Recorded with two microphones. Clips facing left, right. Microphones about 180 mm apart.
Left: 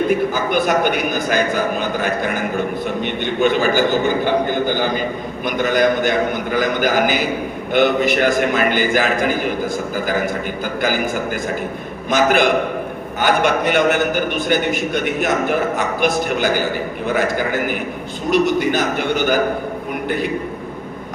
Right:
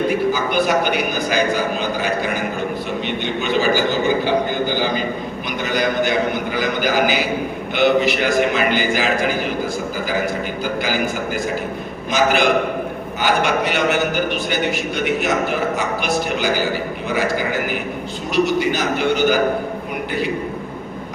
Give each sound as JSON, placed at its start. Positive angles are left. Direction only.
{"t": 0.1, "sound": "a man's voice", "side_deg": 50}
{"t": 3.4, "sound": "a man's voice", "side_deg": 50}
{"t": 10.8, "sound": "a man's voice", "side_deg": 50}
{"t": 12.1, "sound": "a man's voice", "side_deg": 50}